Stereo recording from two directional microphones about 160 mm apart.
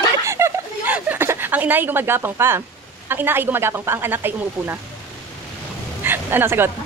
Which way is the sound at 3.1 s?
15° right (ahead or behind).